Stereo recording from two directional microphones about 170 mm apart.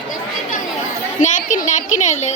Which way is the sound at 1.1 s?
50° left (ahead or behind).